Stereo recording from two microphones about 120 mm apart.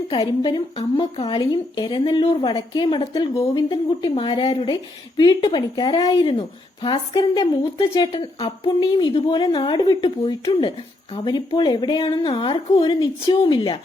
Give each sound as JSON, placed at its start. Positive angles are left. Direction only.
{"t": 0.1, "sound": "a woman's voice", "side_deg": 45}